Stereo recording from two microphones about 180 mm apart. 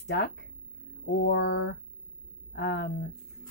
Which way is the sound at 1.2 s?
70° left (ahead or behind).